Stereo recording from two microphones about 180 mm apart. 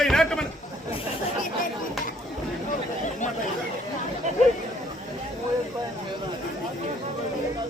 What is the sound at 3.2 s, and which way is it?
Chatter, 40° left (ahead or behind).